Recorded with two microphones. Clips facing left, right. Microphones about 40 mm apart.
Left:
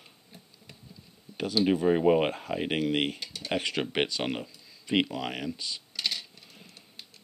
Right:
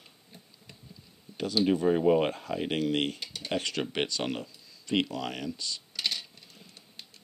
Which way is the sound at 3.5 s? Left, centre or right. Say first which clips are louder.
Left 2 dB; centre.